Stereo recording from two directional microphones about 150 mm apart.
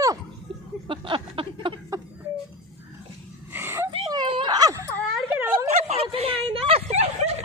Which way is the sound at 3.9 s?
30° right (ahead or behind).